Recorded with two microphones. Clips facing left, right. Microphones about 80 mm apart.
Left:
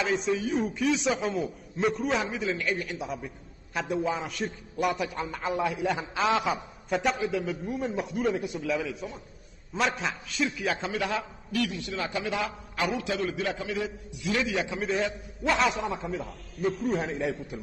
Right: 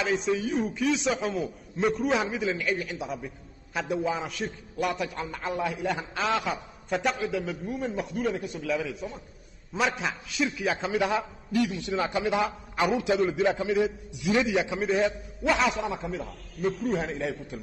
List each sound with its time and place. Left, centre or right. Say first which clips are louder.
0.0 s a man's voice: right 1 dB; centre
11.0 s a man's voice: right 4 dB; centre
14.8 s a man's voice: right 3 dB; centre